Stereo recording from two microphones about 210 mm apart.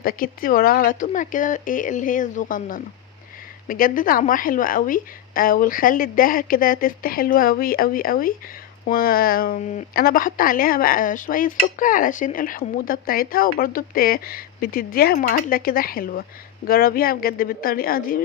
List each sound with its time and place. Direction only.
0.0 s speech: 45° left (ahead or behind)